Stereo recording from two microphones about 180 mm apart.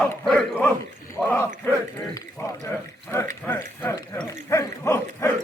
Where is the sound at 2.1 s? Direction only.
15° left (ahead or behind).